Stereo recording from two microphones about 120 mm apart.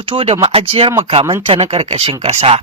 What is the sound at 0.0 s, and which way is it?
Speech, 50° right (ahead or behind).